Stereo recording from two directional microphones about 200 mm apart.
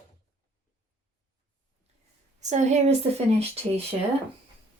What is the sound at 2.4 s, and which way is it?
Speech, 35° right (ahead or behind).